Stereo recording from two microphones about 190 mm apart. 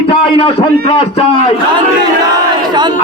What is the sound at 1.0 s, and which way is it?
Speech, 30° left (ahead or behind).